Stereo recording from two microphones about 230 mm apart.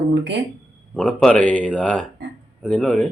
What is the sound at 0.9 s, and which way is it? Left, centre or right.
Speech, centre.